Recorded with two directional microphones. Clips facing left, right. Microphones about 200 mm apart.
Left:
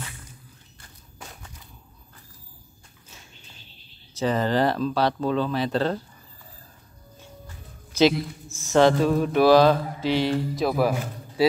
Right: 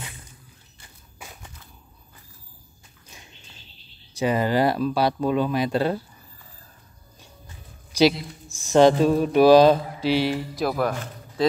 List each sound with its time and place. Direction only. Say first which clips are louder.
0.7 s walk: even; 10° right (ahead or behind)
4.1 s speech: right 1 dB; 10° right (ahead or behind)
7.2 s speech: left 4 dB; 15° right (ahead or behind)
10.0 s speech: right 1 dB; 20° left (ahead or behind)
10.5 s a man's voice: left 2 dB; centre (ahead or behind)